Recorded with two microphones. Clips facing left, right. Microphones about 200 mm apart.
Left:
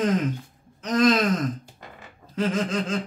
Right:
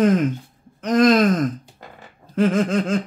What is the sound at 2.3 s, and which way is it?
Speech, 55° right (ahead or behind).